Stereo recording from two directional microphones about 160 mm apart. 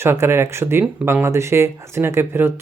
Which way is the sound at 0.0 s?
15° right (ahead or behind).